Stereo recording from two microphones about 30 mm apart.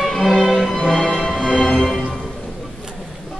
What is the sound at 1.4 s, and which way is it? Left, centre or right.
Music, left.